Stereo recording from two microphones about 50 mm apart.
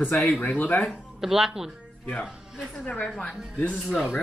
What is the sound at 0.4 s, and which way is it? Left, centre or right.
Speech, left.